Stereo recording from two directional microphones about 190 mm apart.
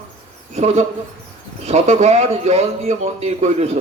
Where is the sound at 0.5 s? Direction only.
35° right (ahead or behind).